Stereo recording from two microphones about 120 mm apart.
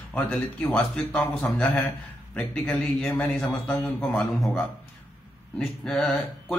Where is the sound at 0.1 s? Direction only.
10° left (ahead or behind).